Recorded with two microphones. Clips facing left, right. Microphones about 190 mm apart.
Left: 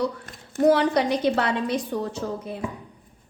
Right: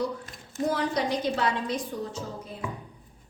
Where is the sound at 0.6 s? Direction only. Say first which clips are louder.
Left 8 dB; 70° left (ahead or behind).